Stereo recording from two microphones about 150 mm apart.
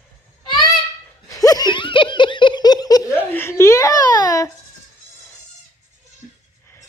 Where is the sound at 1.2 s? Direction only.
25° left (ahead or behind).